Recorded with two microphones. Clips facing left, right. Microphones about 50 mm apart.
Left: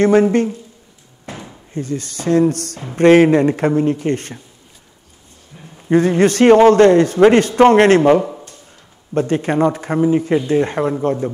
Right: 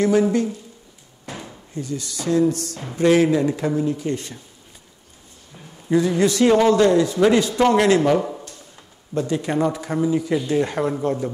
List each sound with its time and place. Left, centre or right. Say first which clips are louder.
0.0 s a man's voice: left 5 dB; left
1.3 s drawer open or close: left 2 dB; centre
1.7 s a man's voice: left 5 dB; left
5.5 s a sound: left 3 dB; centre
5.9 s a man's voice: left 5 dB; left